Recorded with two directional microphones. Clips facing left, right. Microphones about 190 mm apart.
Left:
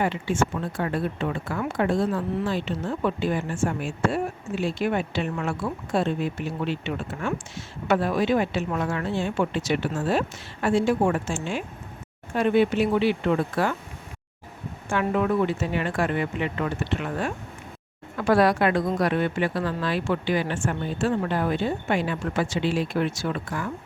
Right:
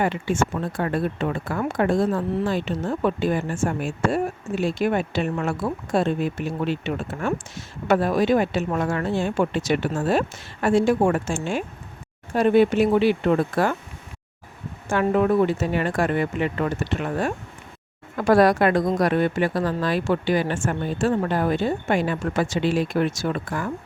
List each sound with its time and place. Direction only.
0.0 s a woman's voice: 50° right (ahead or behind)
14.8 s a woman's voice: 40° right (ahead or behind)